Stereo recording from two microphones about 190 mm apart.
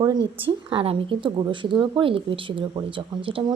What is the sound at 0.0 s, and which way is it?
A woman's voice, 20° right (ahead or behind).